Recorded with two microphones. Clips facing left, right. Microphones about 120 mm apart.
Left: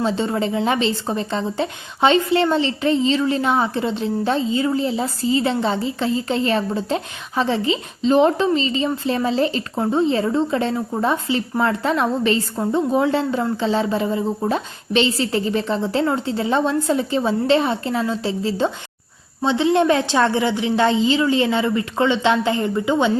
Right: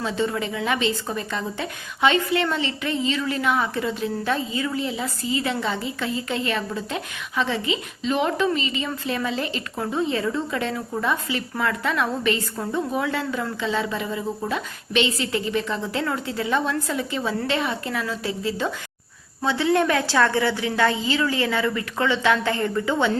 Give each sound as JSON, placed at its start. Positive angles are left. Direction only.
{"t": 0.0, "sound": "a woman's voice", "side_deg": 30}